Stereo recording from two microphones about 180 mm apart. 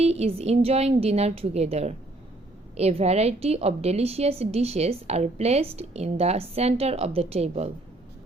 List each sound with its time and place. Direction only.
0.0 s a woman's voice: 35° right (ahead or behind)